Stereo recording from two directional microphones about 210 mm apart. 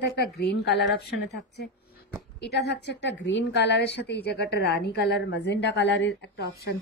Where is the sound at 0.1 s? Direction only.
50° left (ahead or behind).